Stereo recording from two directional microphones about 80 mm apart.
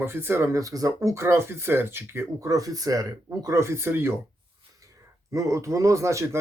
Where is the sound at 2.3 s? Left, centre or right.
Right.